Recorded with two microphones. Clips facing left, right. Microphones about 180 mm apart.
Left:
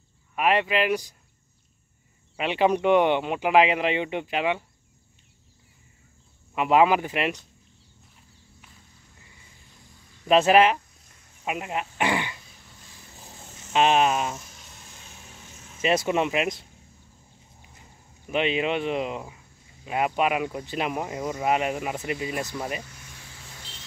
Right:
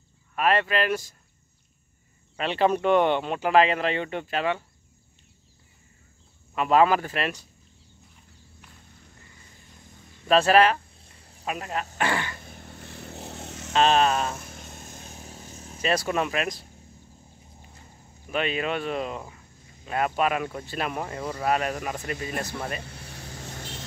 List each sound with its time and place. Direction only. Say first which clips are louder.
0.4 s speech: left 1 dB; 15° left (ahead or behind)
2.3 s speech: left 1 dB; 15° left (ahead or behind)
6.5 s speech: left 1 dB; 15° left (ahead or behind)
10.2 s speech: left 1 dB; 15° left (ahead or behind)
11.1 s cricket: right 5 dB; 35° right (ahead or behind)
11.4 s speech: left 1 dB; 15° left (ahead or behind)
12.0 s throat clearing: left 2 dB; 15° left (ahead or behind)
12.4 s vehicle: right 9 dB; 60° right (ahead or behind); by 13.7 s 75° right (ahead or behind)
13.7 s speech: even; 15° left (ahead or behind)
14.4 s vehicle: right 7 dB; 55° right (ahead or behind); by 15.8 s 35° right (ahead or behind)
15.8 s speech: left 2 dB; 20° left (ahead or behind)
18.3 s speech: left 3 dB; 20° left (ahead or behind)
23.1 s vehicle: right 11 dB; 40° right (ahead or behind)